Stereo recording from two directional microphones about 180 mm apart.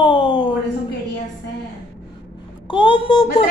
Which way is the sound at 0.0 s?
30° left (ahead or behind).